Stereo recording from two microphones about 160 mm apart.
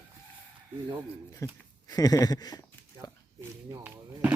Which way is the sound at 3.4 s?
10° right (ahead or behind).